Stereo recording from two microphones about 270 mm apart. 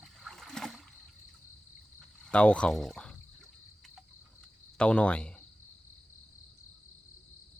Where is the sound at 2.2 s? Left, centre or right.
Centre.